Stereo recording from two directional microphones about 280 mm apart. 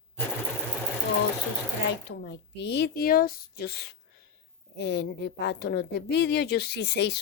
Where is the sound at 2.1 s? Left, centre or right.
Left.